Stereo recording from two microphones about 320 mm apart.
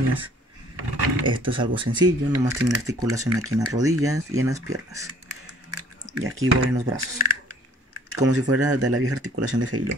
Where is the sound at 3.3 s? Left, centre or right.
Right.